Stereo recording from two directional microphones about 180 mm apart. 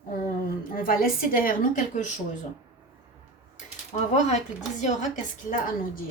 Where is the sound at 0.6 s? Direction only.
50° left (ahead or behind).